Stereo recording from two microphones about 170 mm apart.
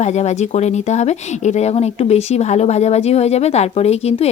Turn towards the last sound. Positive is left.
turn(degrees=40)  # may be behind; listen again after turning